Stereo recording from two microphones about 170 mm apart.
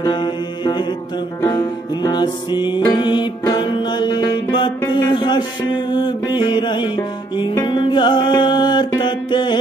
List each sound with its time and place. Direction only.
0.0 s mantra: 25° left (ahead or behind)
1.4 s music: 25° left (ahead or behind)